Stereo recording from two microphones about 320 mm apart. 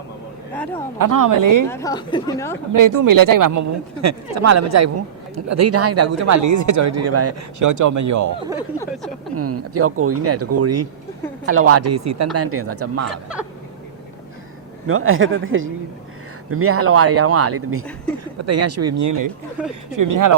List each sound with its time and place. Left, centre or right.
0.5 s speech: centre
0.9 s speech: right
1.7 s speech: centre
2.7 s speech: right
7.6 s speech: right
8.5 s speech: centre
9.3 s speech: right
14.8 s speech: right